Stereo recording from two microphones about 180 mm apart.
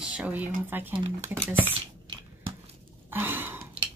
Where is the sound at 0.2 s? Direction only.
10° right (ahead or behind).